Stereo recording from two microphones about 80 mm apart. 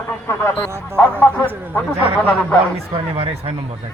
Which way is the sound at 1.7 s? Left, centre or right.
Centre.